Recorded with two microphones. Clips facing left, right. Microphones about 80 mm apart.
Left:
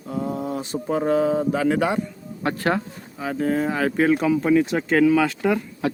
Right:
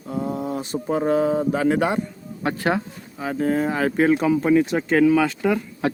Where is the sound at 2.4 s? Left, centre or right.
Centre.